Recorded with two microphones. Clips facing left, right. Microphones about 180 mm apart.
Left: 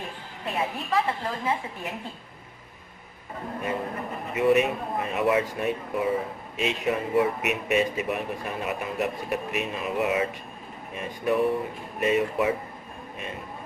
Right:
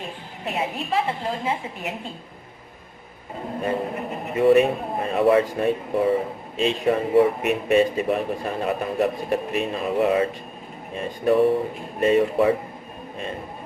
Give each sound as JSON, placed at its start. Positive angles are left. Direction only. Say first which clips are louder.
{"t": 0.0, "sound": "a woman's voice", "louder": "right 3 dB", "side_deg": -25}
{"t": 3.6, "sound": "a man's voice", "louder": "right 5 dB", "side_deg": -30}